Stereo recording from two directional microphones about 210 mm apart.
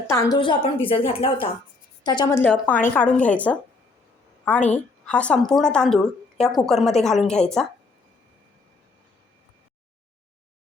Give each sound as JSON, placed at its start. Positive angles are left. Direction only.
{"t": 0.1, "sound": "a woman's voice", "side_deg": 15}
{"t": 4.7, "sound": "a woman's voice", "side_deg": 5}